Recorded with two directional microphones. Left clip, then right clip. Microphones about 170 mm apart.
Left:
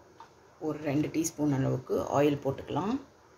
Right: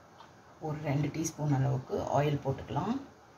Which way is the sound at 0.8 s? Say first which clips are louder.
Left 4 dB; 70° left (ahead or behind).